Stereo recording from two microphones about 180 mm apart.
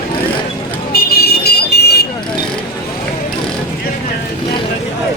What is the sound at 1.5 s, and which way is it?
Buzzer, 65° left (ahead or behind).